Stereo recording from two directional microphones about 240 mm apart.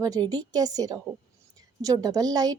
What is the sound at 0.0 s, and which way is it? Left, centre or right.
A woman's voice, centre.